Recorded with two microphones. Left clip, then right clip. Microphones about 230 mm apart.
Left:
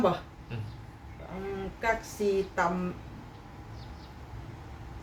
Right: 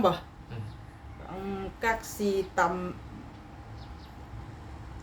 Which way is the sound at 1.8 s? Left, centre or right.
Right.